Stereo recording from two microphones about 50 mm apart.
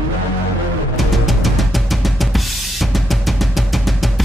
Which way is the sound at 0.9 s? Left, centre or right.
Centre.